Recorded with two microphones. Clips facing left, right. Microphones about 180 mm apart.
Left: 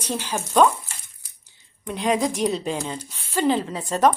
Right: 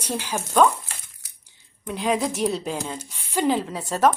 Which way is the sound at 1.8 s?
Centre (ahead or behind).